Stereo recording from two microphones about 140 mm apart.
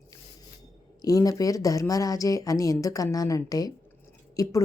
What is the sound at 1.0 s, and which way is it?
Speech, 25° left (ahead or behind).